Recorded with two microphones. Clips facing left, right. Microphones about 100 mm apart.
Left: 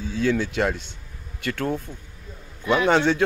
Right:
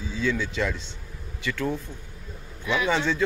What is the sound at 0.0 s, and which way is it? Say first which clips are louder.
Speech: left 4 dB; 60° left (ahead or behind).